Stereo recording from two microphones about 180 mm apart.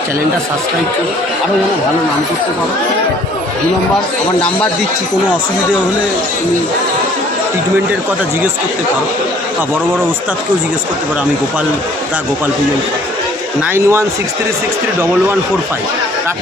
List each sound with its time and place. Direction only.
13.7 s speech: 15° right (ahead or behind)